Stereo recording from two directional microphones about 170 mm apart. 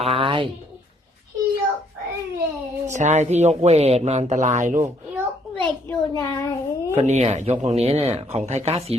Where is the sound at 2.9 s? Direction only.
45° right (ahead or behind).